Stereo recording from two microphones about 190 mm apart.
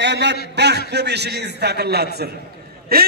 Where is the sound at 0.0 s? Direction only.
65° right (ahead or behind).